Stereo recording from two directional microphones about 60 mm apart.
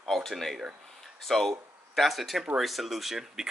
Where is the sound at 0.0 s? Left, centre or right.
Centre.